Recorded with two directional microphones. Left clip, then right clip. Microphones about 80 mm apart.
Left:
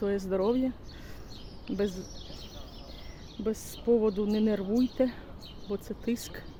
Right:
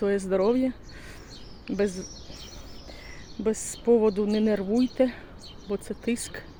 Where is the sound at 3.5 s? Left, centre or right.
Right.